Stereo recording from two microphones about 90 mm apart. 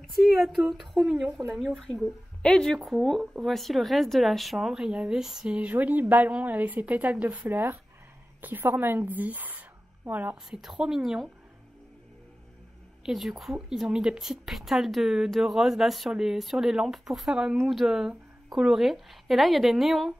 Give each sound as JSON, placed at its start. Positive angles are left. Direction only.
{"t": 0.0, "sound": "a woman's voice", "side_deg": 0}
{"t": 10.6, "sound": "speech", "side_deg": -5}
{"t": 13.0, "sound": "speech", "side_deg": -5}